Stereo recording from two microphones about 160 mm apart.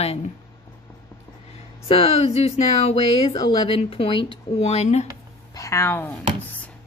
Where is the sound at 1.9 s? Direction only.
40° left (ahead or behind).